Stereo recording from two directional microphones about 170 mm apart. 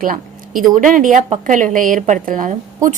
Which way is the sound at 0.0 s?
55° right (ahead or behind).